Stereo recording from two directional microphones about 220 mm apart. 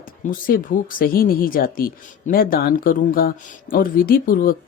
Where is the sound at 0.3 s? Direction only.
40° left (ahead or behind).